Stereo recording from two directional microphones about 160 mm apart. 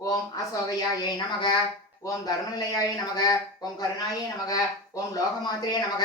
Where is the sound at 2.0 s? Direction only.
25° left (ahead or behind).